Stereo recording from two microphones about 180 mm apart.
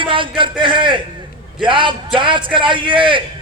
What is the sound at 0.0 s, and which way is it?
A man's voice, 30° right (ahead or behind).